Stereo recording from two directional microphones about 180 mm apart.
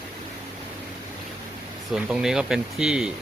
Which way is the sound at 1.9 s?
5° right (ahead or behind).